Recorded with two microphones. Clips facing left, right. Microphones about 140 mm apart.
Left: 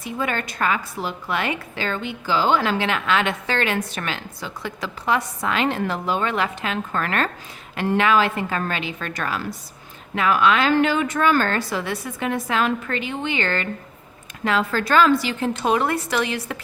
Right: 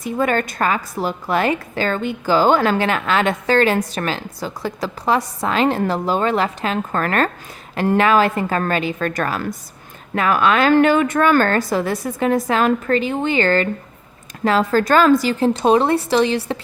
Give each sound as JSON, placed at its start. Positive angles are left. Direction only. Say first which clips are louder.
{"t": 0.0, "sound": "a woman's voice", "louder": "right 7 dB", "side_deg": -45}